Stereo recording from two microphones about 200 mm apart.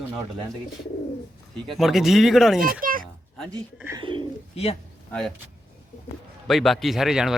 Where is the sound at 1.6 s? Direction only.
Centre (ahead or behind).